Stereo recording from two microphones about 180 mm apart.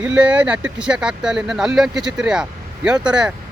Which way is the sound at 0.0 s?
5° right (ahead or behind).